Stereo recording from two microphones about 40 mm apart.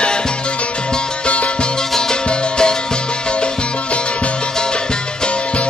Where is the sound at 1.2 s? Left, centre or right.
Left.